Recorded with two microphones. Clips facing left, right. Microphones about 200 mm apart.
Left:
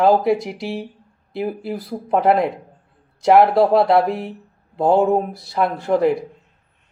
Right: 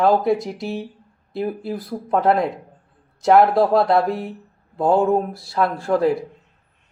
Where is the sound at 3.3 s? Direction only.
20° left (ahead or behind).